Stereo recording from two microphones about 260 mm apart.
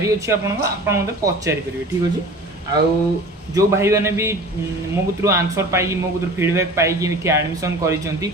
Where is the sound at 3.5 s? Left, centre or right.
Centre.